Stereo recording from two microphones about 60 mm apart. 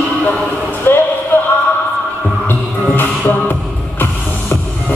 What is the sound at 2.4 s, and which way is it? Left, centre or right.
Music, left.